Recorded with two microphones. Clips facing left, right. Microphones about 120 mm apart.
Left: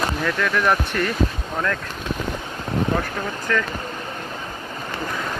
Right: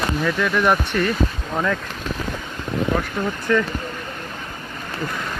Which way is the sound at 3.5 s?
20° right (ahead or behind).